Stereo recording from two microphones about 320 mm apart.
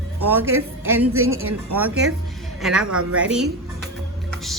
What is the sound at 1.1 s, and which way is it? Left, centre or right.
Speech, right.